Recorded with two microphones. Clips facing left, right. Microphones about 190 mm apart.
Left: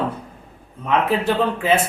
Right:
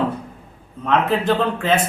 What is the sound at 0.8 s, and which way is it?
Speech, 10° left (ahead or behind).